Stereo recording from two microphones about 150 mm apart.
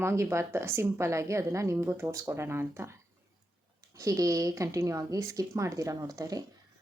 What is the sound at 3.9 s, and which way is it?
Speech, 20° right (ahead or behind).